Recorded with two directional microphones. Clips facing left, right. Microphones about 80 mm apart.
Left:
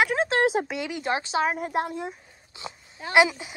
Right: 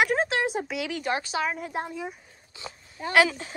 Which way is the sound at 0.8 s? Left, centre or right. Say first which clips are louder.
Left 1 dB; left.